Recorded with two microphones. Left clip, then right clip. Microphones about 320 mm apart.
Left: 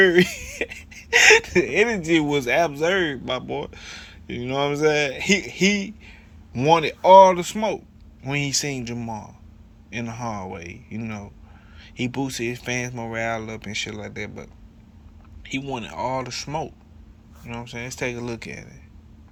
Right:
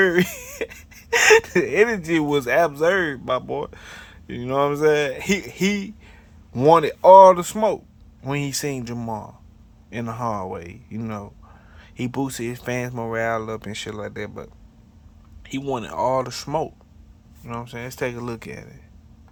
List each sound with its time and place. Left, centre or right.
0.0 s speech: centre